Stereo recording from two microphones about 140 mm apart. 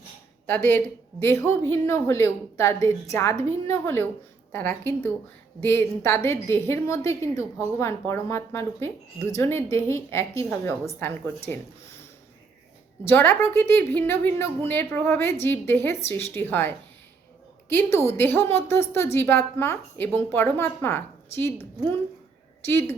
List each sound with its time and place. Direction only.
0.4 s a woman's voice: 15° left (ahead or behind)
13.1 s a woman's voice: 15° left (ahead or behind)
17.9 s a woman's voice: 20° left (ahead or behind)
22.6 s a woman's voice: 15° left (ahead or behind)